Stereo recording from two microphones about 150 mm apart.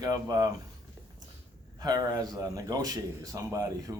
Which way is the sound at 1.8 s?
25° right (ahead or behind).